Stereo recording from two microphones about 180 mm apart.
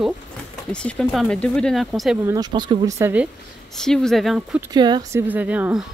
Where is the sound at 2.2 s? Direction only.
20° right (ahead or behind).